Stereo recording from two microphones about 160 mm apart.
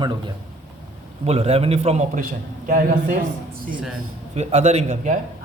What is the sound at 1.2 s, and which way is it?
A man's voice, 40° right (ahead or behind).